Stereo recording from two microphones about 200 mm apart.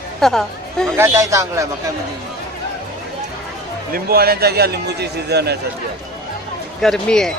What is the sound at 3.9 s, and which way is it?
A man's voice, 50° right (ahead or behind).